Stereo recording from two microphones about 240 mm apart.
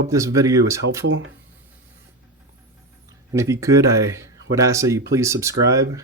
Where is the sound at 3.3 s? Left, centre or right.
Centre.